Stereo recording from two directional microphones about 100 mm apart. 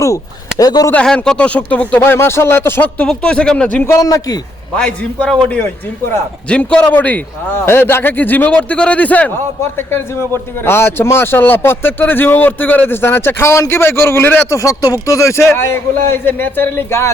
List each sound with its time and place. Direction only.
0.6 s a man's voice: 40° left (ahead or behind)
1.0 s a man's voice: 5° left (ahead or behind)
2.0 s a man's voice: 25° left (ahead or behind)
3.1 s a man's voice: 10° left (ahead or behind)
3.8 s a man's voice: 35° left (ahead or behind)
4.8 s a man's voice: 10° left (ahead or behind); by 17.1 s 25° left (ahead or behind)